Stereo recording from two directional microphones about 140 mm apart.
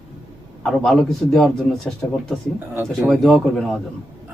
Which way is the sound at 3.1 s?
5° left (ahead or behind).